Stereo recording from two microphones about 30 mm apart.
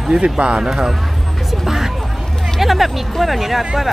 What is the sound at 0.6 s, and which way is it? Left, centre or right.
Speech, centre.